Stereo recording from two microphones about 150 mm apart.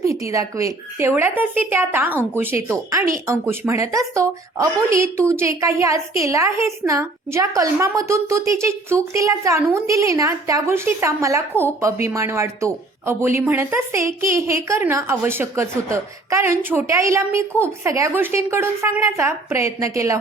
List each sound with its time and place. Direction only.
0.0 s a woman's voice: 20° right (ahead or behind)